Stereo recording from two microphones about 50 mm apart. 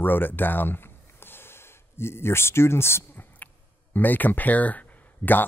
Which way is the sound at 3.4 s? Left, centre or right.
Left.